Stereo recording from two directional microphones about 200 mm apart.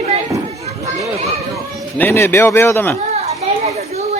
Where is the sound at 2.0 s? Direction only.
10° left (ahead or behind).